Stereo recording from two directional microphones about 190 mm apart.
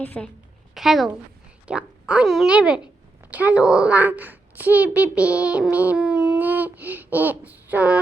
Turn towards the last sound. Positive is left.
turn(degrees=-10)  # may be behind; listen again after turning